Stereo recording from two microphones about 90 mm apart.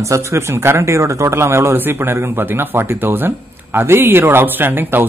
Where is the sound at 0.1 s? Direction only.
30° right (ahead or behind).